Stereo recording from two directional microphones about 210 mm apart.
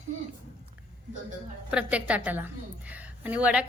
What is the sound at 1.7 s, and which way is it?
A woman's voice, 5° right (ahead or behind).